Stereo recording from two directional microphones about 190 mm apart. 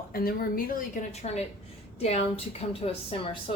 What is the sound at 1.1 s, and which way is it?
A woman's voice, 35° left (ahead or behind).